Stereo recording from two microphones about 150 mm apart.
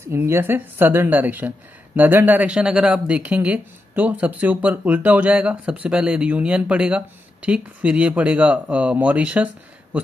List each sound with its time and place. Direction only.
0.0 s speech: 15° right (ahead or behind)